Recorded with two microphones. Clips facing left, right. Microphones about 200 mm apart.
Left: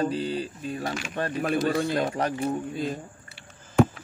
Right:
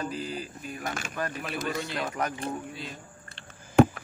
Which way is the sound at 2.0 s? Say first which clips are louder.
Left 4 dB; 30° left (ahead or behind).